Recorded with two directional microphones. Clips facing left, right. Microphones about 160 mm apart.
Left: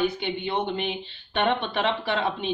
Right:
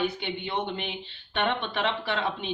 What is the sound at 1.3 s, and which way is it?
Speech, 35° left (ahead or behind).